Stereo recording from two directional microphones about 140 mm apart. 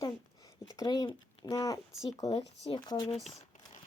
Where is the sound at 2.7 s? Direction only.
30° left (ahead or behind).